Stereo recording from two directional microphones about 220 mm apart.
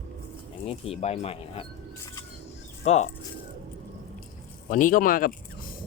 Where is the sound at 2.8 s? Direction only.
30° left (ahead or behind).